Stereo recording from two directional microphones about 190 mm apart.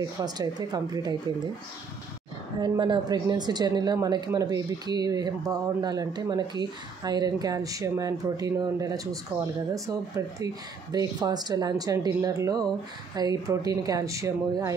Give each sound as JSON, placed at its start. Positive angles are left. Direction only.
{"t": 0.2, "sound": "a woman's voice", "side_deg": -20}
{"t": 2.6, "sound": "a woman's voice", "side_deg": -25}